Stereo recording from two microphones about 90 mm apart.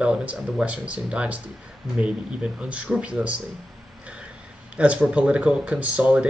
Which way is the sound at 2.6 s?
15° right (ahead or behind).